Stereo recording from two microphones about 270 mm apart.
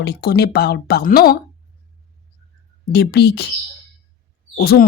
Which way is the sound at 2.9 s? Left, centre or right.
Left.